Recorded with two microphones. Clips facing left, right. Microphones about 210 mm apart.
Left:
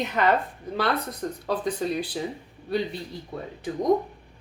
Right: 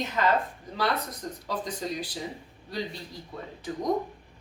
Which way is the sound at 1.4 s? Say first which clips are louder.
Left 6 dB; 60° left (ahead or behind).